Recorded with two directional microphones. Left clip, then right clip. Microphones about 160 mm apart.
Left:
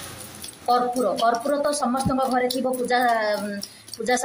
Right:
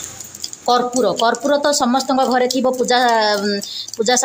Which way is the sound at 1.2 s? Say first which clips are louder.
Right 5 dB; 60° right (ahead or behind).